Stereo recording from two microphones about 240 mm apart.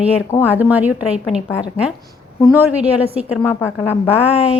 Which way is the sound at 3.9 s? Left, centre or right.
Left.